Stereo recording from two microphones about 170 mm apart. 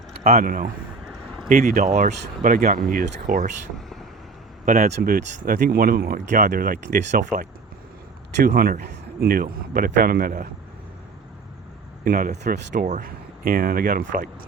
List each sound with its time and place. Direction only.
0.3 s speech: 55° right (ahead or behind)
4.6 s speech: 60° right (ahead or behind)
8.4 s speech: 60° right (ahead or behind)
12.0 s speech: 55° right (ahead or behind)